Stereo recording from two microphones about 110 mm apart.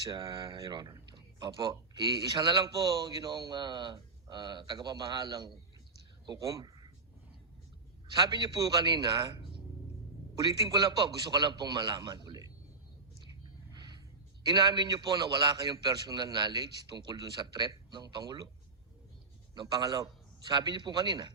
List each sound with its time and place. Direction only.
0.0 s a man's voice: 40° right (ahead or behind)
8.0 s a man's voice: 40° right (ahead or behind)
13.7 s a sound: 40° right (ahead or behind)
14.4 s a man's voice: 40° right (ahead or behind)
19.5 s a man's voice: 40° right (ahead or behind)